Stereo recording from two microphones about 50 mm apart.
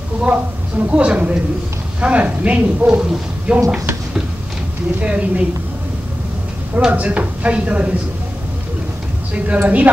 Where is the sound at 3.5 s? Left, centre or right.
Centre.